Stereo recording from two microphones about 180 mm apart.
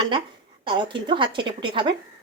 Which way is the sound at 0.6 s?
25° right (ahead or behind).